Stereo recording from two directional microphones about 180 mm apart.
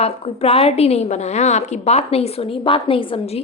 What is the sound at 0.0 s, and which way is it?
A woman's voice, 35° left (ahead or behind).